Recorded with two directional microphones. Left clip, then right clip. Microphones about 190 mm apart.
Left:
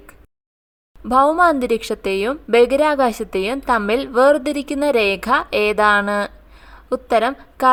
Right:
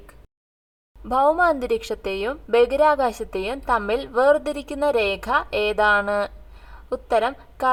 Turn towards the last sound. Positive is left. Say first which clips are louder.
# left 4 dB
turn(degrees=45)  # may be behind; listen again after turning